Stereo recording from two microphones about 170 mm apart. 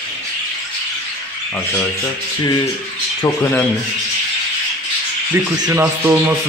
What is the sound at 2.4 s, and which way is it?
Speech, 25° left (ahead or behind).